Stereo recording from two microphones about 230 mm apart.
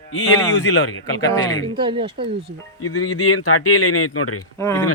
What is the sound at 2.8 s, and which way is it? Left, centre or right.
Speech, left.